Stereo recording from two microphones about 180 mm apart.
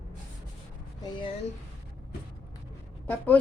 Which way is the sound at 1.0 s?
25° left (ahead or behind).